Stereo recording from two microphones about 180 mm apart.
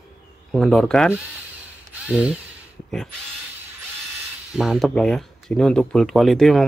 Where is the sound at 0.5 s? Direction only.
Centre (ahead or behind).